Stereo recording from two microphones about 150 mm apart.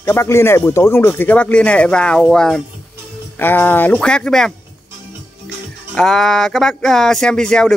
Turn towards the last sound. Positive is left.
turn(degrees=5)  # may be behind; listen again after turning